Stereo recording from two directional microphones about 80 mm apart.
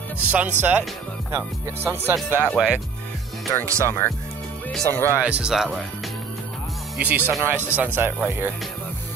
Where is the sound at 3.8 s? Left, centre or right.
Left.